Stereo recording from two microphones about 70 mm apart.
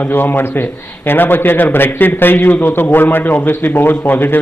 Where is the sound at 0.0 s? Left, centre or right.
Left.